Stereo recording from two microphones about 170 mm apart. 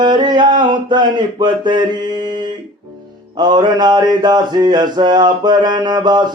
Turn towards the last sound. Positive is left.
turn(degrees=-25)  # may be behind; listen again after turning